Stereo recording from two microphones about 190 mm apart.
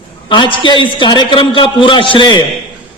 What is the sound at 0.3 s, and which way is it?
A man's voice, 25° left (ahead or behind).